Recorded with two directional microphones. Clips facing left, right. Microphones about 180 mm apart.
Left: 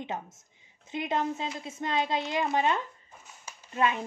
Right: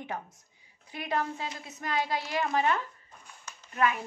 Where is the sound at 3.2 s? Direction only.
10° left (ahead or behind).